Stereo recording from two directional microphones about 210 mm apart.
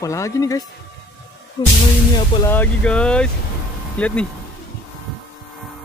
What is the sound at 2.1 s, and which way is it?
Speech, 10° left (ahead or behind).